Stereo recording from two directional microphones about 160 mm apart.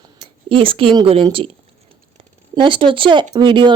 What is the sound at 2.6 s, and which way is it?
Speech, 30° right (ahead or behind).